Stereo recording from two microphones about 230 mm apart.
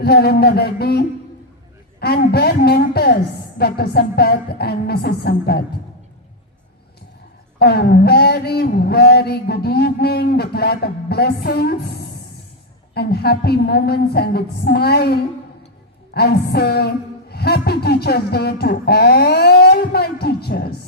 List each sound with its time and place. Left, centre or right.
0.0 s speech: left
7.6 s speech: left